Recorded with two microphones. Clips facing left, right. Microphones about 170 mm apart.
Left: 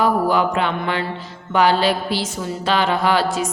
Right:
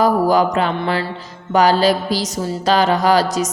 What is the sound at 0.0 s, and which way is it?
Mantra, 40° right (ahead or behind).